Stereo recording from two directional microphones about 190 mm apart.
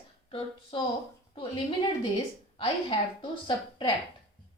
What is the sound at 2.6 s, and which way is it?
A woman's voice, 25° left (ahead or behind).